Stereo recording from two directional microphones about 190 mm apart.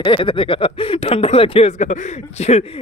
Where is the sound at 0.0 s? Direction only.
25° left (ahead or behind).